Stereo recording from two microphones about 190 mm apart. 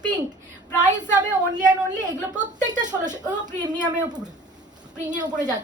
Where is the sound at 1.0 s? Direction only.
40° right (ahead or behind).